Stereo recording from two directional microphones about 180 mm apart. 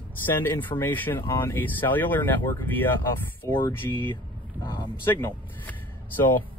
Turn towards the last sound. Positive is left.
turn(degrees=10)  # may be behind; listen again after turning